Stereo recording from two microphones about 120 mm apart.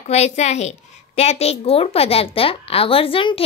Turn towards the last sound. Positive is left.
turn(degrees=45)  # may be behind; listen again after turning